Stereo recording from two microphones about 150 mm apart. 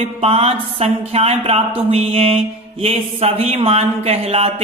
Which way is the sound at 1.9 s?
40° right (ahead or behind).